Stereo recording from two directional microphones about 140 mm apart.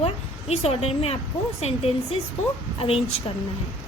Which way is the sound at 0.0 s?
45° left (ahead or behind).